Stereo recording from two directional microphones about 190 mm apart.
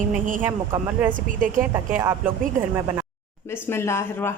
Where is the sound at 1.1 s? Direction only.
45° right (ahead or behind).